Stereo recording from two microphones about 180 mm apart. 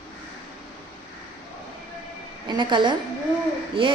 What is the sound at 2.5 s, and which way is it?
A woman's voice, 25° right (ahead or behind).